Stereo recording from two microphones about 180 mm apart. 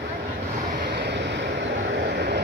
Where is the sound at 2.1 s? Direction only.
60° right (ahead or behind).